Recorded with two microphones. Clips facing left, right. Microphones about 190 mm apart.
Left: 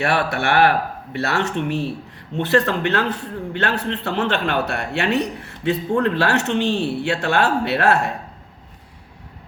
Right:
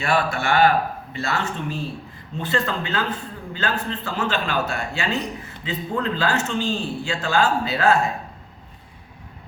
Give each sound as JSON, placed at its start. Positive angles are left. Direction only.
{"t": 0.0, "sound": "a man's voice", "side_deg": 65}